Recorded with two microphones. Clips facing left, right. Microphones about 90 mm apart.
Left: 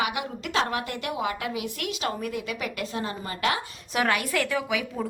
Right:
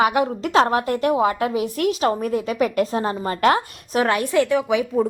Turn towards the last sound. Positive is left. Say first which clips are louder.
# right 9 dB
turn(degrees=-20)  # may be behind; listen again after turning